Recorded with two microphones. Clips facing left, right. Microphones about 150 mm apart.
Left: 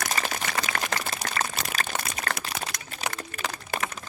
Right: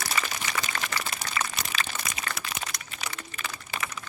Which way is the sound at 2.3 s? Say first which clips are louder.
Left 6 dB; 40° left (ahead or behind).